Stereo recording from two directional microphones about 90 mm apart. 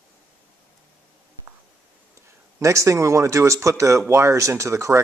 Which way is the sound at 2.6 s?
35° right (ahead or behind).